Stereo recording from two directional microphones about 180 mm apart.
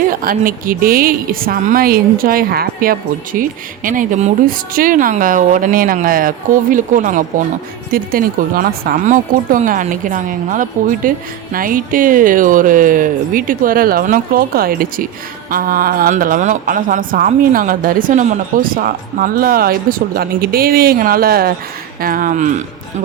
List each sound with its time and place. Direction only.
0.0 s a woman's voice: 50° right (ahead or behind)